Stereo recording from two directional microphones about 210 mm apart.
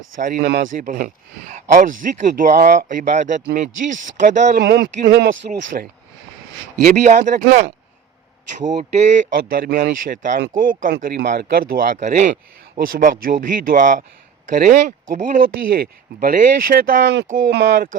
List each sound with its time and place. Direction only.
0.2 s speech: 45° right (ahead or behind)
0.8 s speech: 40° right (ahead or behind)
4.5 s speech: 50° right (ahead or behind)
5.5 s speech: 35° right (ahead or behind)
9.5 s speech: 45° right (ahead or behind)